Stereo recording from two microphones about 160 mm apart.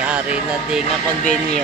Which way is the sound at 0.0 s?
5° right (ahead or behind).